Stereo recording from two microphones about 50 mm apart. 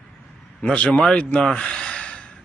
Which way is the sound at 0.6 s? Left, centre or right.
Left.